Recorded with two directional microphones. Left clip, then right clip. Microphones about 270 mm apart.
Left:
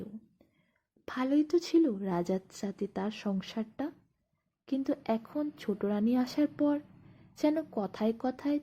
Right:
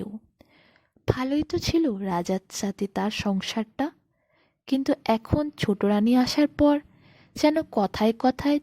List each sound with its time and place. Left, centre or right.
1.0 s speech: right